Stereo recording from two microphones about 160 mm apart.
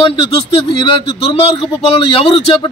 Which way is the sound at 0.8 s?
30° left (ahead or behind).